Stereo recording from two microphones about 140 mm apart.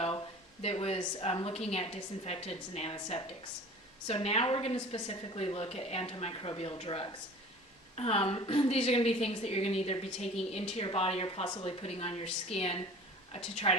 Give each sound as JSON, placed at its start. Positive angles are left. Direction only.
{"t": 0.6, "sound": "a woman's voice", "side_deg": 45}